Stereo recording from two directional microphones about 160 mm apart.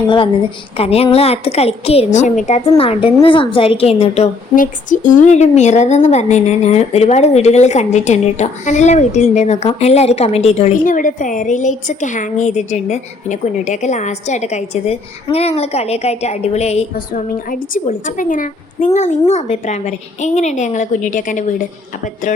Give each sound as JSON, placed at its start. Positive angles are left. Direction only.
{"t": 0.8, "sound": "a woman's voice", "side_deg": 40}
{"t": 4.5, "sound": "a woman's voice", "side_deg": 55}
{"t": 17.1, "sound": "a woman's voice", "side_deg": 55}